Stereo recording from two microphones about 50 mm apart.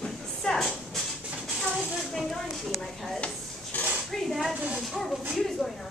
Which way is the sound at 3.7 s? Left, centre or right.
Left.